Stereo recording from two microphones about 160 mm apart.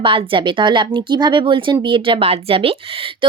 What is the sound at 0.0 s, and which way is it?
Speech, 30° right (ahead or behind).